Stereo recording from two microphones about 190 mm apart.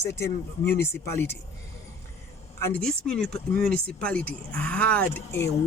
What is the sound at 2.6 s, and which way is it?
Speech, 5° left (ahead or behind).